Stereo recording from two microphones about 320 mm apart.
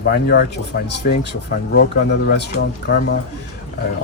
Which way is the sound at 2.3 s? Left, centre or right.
Left.